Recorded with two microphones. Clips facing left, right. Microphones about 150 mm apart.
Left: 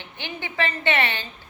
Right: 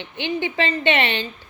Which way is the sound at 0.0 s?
20° right (ahead or behind).